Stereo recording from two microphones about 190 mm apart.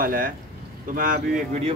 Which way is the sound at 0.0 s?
50° right (ahead or behind).